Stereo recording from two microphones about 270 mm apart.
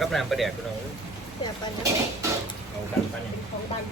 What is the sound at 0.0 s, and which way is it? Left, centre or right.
Speech, centre.